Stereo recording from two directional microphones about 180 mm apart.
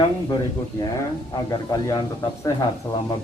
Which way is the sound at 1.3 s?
20° left (ahead or behind).